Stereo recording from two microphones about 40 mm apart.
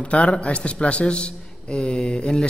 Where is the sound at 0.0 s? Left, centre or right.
Left.